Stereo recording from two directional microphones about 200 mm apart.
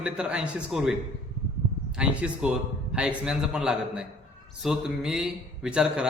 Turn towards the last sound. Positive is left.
turn(degrees=-5)  # may be behind; listen again after turning